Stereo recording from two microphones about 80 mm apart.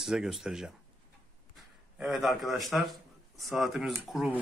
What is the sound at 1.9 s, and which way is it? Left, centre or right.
Speech, centre.